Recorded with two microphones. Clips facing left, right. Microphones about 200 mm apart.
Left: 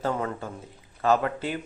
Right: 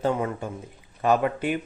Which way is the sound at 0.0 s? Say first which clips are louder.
Right 3 dB; 15° right (ahead or behind).